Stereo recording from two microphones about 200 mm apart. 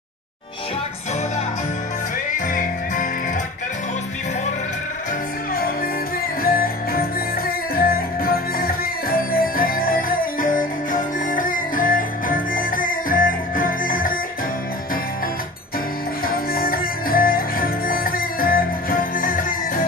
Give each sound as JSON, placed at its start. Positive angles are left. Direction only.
{"t": 6.4, "sound": "music", "side_deg": 50}
{"t": 16.3, "sound": "music", "side_deg": 45}